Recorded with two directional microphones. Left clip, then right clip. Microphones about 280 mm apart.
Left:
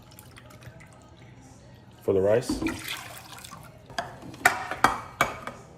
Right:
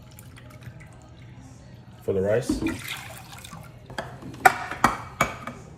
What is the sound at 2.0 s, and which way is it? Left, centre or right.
Speech, centre.